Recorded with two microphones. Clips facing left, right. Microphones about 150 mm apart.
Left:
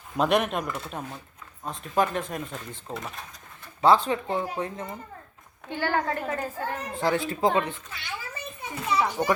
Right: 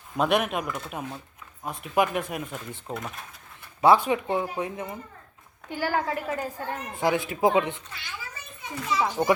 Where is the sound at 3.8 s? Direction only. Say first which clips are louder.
Right 1 dB; 10° right (ahead or behind).